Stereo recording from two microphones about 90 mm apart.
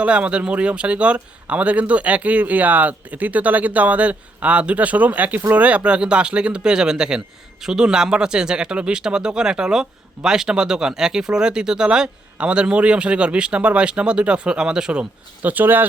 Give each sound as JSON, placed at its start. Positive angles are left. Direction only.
{"t": 0.0, "sound": "speech", "side_deg": -15}